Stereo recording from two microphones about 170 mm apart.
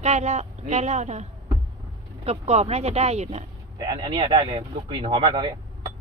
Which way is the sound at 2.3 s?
40° right (ahead or behind).